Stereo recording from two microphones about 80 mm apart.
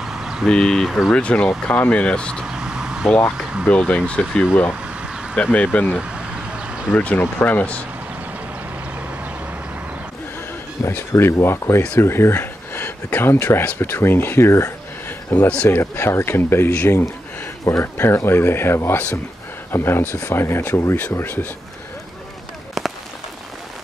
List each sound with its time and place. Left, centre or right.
0.0 s vehicle: centre
0.5 s speech: centre
1.1 s speech: centre
2.4 s vehicle: centre
3.7 s speech: centre
5.9 s vehicle: centre
7.0 s speech: left
10.8 s speech: left
15.3 s speech: centre
15.8 s speech: left